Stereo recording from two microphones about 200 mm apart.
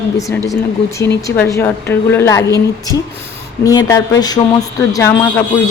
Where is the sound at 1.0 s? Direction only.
15° left (ahead or behind).